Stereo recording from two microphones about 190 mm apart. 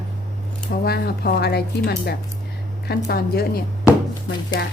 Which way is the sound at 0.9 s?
55° left (ahead or behind).